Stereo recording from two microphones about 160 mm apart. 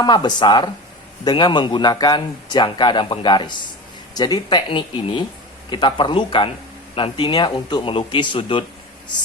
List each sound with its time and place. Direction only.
0.0 s speech: 25° left (ahead or behind)